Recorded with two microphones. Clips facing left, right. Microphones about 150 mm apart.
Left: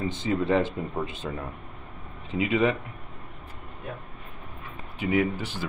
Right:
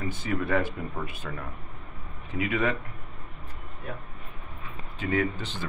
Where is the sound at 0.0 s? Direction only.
20° left (ahead or behind).